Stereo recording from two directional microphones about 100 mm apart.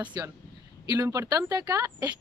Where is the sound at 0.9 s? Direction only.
30° right (ahead or behind).